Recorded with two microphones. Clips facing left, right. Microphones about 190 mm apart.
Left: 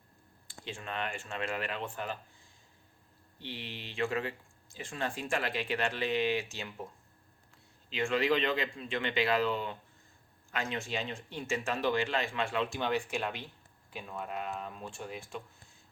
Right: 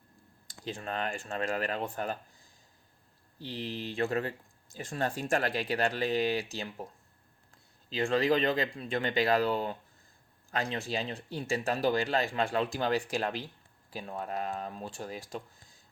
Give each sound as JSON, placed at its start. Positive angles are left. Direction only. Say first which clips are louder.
{"t": 0.4, "sound": "speech", "louder": "right 4 dB", "side_deg": -40}
{"t": 3.3, "sound": "speech", "louder": "right 6 dB", "side_deg": -35}